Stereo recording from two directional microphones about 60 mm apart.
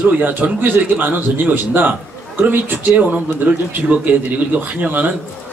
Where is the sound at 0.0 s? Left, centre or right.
Right.